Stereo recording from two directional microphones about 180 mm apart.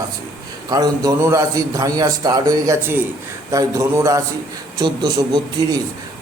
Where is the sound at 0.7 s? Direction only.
20° right (ahead or behind).